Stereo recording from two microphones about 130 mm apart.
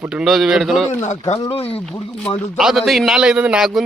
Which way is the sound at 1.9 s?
10° left (ahead or behind).